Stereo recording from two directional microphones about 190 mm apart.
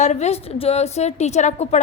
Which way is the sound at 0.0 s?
35° left (ahead or behind).